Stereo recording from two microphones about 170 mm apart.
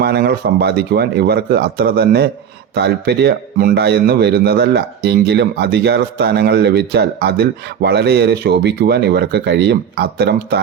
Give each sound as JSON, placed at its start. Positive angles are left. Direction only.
{"t": 0.0, "sound": "speech", "side_deg": -70}